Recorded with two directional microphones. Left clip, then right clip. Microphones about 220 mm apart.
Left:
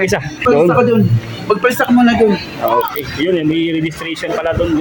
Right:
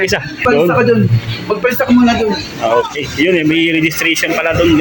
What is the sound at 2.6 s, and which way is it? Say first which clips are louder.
A man's voice: right 1 dB; centre (ahead or behind).